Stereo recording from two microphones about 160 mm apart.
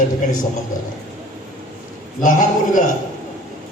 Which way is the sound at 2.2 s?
55° left (ahead or behind).